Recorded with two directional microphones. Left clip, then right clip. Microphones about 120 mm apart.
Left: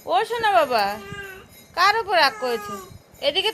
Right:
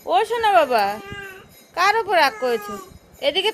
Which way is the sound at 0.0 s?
40° right (ahead or behind).